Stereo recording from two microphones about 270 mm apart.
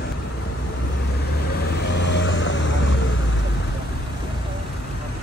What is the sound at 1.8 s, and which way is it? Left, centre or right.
Vehicle, left.